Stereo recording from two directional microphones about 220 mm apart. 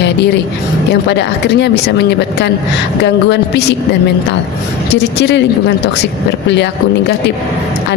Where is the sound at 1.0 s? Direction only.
50° left (ahead or behind).